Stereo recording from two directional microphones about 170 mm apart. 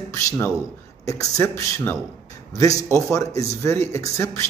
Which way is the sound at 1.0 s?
20° left (ahead or behind).